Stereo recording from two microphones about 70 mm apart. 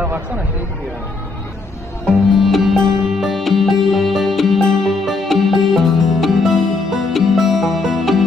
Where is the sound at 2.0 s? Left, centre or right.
Centre.